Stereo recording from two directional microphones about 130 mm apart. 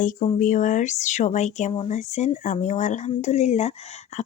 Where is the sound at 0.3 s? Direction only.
75° left (ahead or behind).